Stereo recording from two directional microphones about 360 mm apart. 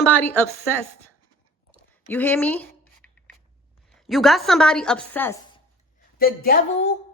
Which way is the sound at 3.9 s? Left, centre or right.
Centre.